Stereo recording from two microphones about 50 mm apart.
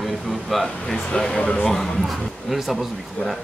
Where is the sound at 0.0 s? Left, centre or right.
Centre.